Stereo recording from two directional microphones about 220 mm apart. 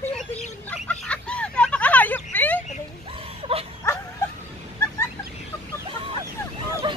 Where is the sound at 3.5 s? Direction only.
25° right (ahead or behind).